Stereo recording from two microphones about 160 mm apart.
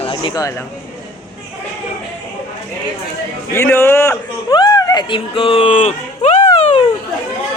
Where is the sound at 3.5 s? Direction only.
15° left (ahead or behind).